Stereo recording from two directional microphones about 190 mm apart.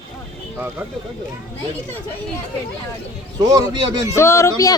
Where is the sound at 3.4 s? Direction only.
20° right (ahead or behind).